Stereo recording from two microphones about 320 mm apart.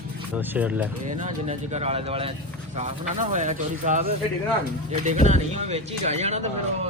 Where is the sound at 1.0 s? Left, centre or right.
Right.